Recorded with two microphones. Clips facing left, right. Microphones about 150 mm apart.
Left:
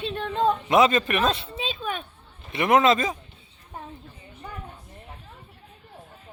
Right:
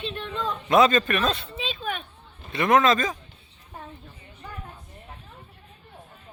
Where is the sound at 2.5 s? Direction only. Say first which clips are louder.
Left 1 dB; 25° left (ahead or behind).